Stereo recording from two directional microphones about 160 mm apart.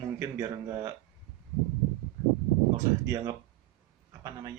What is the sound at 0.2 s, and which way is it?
Speech, 20° right (ahead or behind).